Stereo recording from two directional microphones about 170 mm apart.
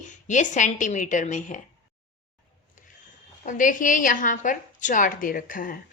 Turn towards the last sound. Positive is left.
turn(degrees=55)  # may be behind; listen again after turning